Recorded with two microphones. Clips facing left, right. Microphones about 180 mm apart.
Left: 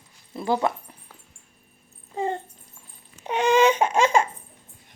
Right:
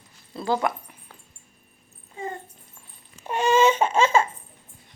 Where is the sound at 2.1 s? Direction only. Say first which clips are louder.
Left 7 dB; 30° left (ahead or behind).